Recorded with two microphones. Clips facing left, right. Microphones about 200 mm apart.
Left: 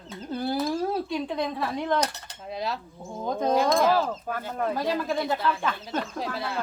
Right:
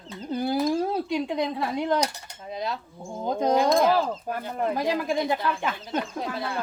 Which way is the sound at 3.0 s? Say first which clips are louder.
Right 3 dB; 15° right (ahead or behind).